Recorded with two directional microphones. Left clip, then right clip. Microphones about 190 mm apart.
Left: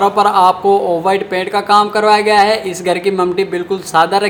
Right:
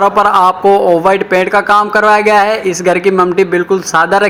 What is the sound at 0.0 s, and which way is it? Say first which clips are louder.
Speech: right 2 dB; 20° right (ahead or behind).